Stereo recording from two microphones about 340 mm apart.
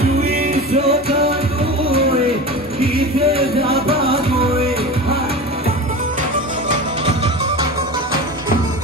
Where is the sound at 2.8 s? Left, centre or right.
Centre.